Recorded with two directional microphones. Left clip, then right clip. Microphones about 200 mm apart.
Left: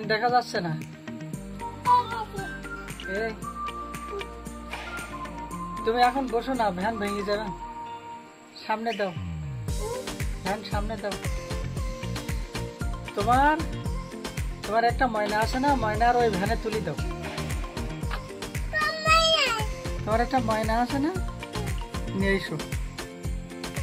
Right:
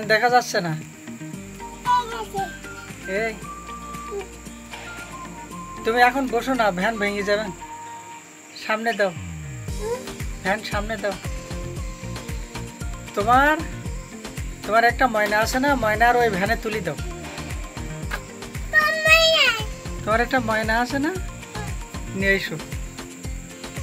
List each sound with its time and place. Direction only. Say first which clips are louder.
0.1 s speech: right 6 dB; centre (ahead or behind)
3.1 s speech: right 5 dB; centre (ahead or behind)
5.9 s speech: right 5 dB; centre (ahead or behind)
8.6 s speech: right 6 dB; centre (ahead or behind)
10.0 s music: right 6 dB; centre (ahead or behind)
13.1 s speech: right 4 dB; 5° left (ahead or behind)
18.8 s music: right 6 dB; 5° left (ahead or behind)
20.1 s speech: right 4 dB; 10° left (ahead or behind)
22.2 s speech: right 6 dB; 20° left (ahead or behind)